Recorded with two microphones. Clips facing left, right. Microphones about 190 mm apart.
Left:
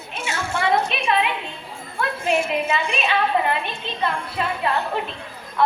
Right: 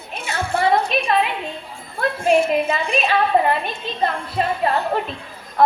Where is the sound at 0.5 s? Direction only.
35° right (ahead or behind).